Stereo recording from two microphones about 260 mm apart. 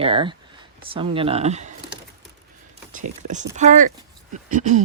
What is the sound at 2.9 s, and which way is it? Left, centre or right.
Speech, right.